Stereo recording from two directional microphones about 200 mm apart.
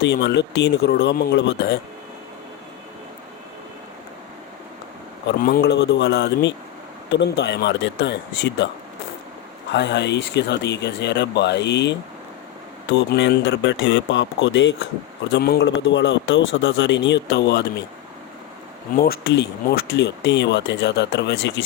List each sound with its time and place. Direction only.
0.0 s a man's voice: 60° left (ahead or behind)
5.4 s a man's voice: 50° left (ahead or behind)
9.7 s a man's voice: 60° left (ahead or behind)
15.3 s a man's voice: 55° left (ahead or behind)
18.9 s a man's voice: 50° left (ahead or behind)